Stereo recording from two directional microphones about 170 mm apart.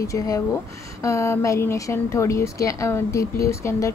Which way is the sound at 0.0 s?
20° left (ahead or behind).